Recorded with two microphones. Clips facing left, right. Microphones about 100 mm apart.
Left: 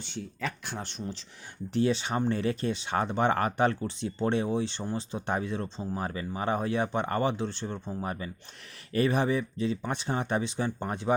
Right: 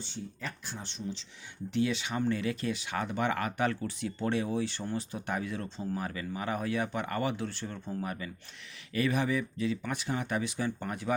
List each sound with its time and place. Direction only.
0.0 s speech: 70° left (ahead or behind); by 1.2 s 50° left (ahead or behind)
1.7 s speech: 35° left (ahead or behind)